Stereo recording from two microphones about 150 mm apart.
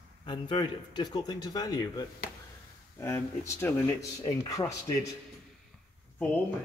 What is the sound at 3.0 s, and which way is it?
A man's voice, 20° left (ahead or behind).